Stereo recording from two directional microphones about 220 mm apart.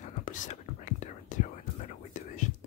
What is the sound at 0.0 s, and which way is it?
Whispering, 35° left (ahead or behind).